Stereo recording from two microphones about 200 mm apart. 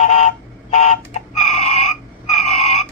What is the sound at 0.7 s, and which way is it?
Chicken, 35° left (ahead or behind).